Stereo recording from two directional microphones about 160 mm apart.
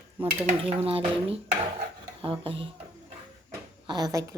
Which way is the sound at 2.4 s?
35° right (ahead or behind).